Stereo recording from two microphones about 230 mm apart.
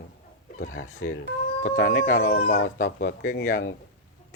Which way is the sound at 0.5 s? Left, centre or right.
Left.